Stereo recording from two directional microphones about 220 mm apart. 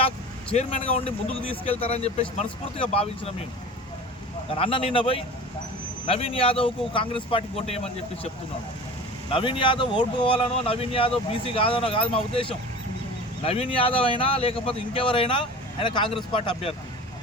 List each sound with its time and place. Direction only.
0.5 s speech: 30° left (ahead or behind)
4.5 s speech: 25° left (ahead or behind)
9.3 s speech: 20° left (ahead or behind)